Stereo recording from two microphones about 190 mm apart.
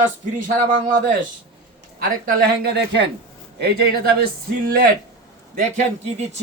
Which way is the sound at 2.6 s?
65° right (ahead or behind).